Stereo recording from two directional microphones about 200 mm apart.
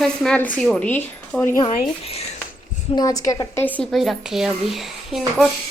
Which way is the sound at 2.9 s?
20° left (ahead or behind).